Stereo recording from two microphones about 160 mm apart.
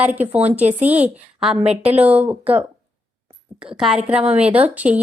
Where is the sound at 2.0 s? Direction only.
10° right (ahead or behind).